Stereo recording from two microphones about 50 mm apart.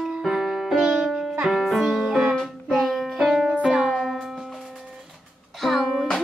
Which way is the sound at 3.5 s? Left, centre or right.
Right.